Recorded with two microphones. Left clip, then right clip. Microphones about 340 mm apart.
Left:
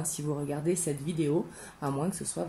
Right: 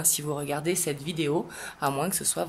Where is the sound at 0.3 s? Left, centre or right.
Right.